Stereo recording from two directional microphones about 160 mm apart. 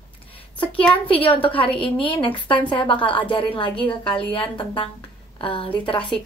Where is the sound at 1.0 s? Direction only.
35° left (ahead or behind).